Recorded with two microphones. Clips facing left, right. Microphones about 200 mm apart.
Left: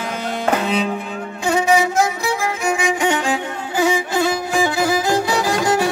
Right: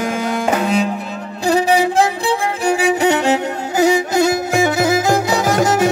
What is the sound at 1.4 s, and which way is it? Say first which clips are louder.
Music: right 2 dB; 35° right (ahead or behind).